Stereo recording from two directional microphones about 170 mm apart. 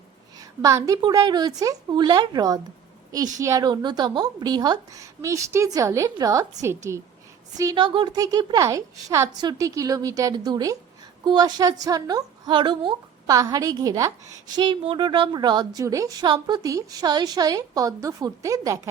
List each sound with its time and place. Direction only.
0.3 s a woman's voice: 20° right (ahead or behind)